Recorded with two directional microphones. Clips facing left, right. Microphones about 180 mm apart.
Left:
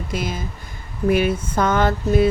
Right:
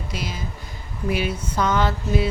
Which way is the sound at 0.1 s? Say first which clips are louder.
Left 6 dB; 50° left (ahead or behind).